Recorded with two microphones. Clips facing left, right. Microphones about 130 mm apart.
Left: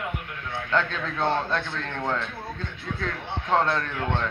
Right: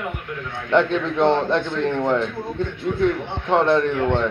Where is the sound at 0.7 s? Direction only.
25° right (ahead or behind).